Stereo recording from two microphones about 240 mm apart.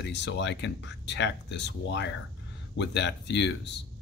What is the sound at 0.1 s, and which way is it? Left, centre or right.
Speech, left.